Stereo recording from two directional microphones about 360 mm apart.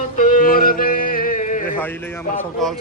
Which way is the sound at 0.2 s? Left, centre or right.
Left.